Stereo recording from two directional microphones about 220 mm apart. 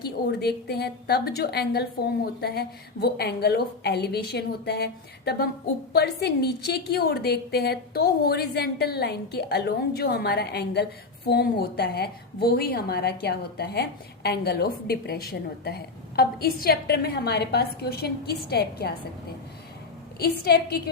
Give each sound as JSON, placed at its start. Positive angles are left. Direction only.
{"t": 0.0, "sound": "a woman's voice", "side_deg": 45}
{"t": 20.1, "sound": "a woman's voice", "side_deg": 45}